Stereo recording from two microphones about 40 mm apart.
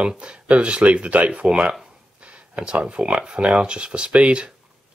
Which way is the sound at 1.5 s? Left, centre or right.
Right.